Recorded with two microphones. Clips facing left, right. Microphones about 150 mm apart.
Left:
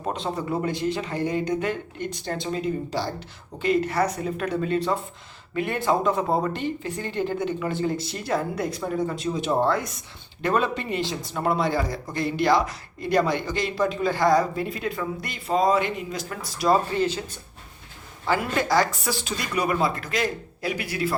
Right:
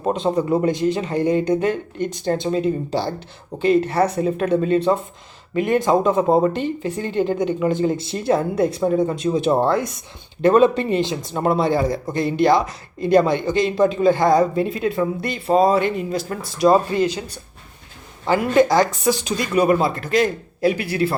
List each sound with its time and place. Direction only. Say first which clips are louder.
0.1 s speech: right 9 dB; 20° right (ahead or behind)
11.0 s speech: right 5 dB; 20° right (ahead or behind)
19.6 s speech: right 6 dB; 30° right (ahead or behind)